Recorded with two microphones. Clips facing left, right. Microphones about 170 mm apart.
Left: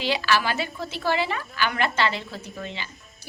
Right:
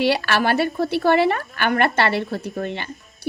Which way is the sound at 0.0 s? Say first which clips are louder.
Right 5 dB; 60° right (ahead or behind).